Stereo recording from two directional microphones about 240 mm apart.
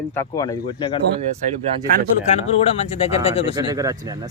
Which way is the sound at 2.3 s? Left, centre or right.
Left.